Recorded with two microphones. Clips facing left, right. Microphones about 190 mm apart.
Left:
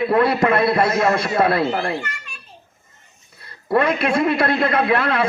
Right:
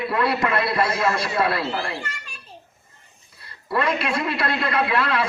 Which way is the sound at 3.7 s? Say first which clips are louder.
Left 5 dB; 55° left (ahead or behind).